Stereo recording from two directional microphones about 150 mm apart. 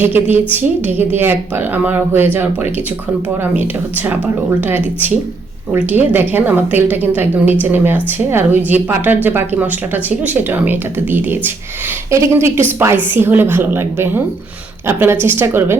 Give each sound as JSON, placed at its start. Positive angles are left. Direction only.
{"t": 0.0, "sound": "a woman's voice", "side_deg": -15}